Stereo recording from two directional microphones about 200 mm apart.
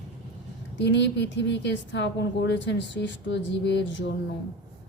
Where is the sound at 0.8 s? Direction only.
60° left (ahead or behind).